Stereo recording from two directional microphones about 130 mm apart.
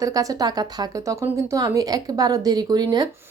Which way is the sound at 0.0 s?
25° right (ahead or behind).